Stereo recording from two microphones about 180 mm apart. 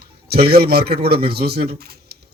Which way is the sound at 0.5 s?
60° right (ahead or behind).